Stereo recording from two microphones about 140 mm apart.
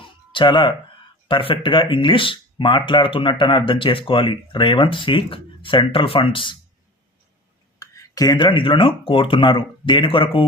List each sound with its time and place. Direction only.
0.0 s music: 35° left (ahead or behind)
1.3 s speech: 40° left (ahead or behind)
7.8 s speech: 25° left (ahead or behind)